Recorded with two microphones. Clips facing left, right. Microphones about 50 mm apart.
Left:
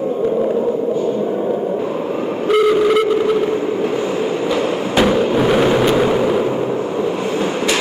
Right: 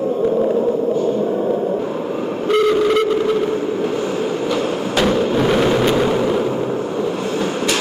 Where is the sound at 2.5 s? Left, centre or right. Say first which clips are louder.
Left 2 dB; centre.